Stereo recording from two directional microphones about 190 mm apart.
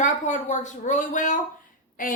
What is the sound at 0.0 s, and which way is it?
A woman's voice, 40° left (ahead or behind).